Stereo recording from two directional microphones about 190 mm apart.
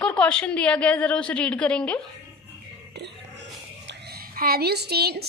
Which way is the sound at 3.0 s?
60° right (ahead or behind).